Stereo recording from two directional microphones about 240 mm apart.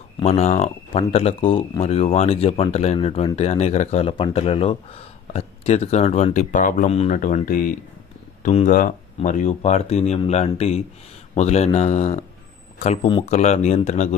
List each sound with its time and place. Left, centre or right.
0.2 s speech: left